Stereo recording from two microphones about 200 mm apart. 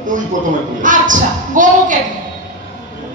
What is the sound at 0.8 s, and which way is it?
A woman's voice, 40° right (ahead or behind).